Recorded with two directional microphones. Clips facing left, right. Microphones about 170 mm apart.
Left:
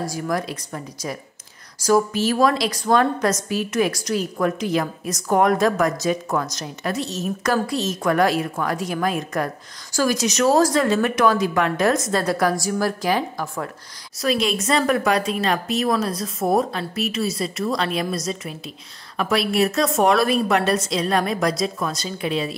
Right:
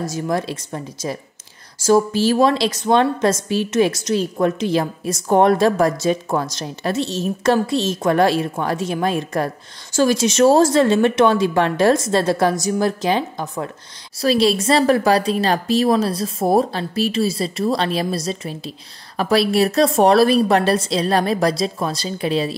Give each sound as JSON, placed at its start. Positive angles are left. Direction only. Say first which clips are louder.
{"t": 0.0, "sound": "a woman's voice", "louder": "right 3 dB", "side_deg": -25}